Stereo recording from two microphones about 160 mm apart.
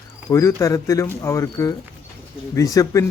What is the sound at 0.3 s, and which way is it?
Speech, 20° left (ahead or behind).